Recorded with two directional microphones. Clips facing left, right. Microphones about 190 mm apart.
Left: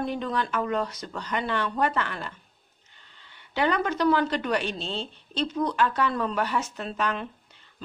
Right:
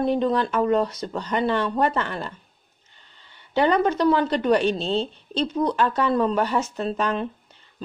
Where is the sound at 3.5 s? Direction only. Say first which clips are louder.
Right 6 dB; 30° right (ahead or behind).